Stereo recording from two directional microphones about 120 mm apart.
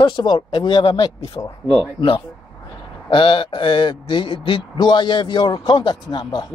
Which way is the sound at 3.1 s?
45° left (ahead or behind).